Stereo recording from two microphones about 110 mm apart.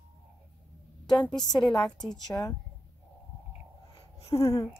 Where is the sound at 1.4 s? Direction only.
40° left (ahead or behind).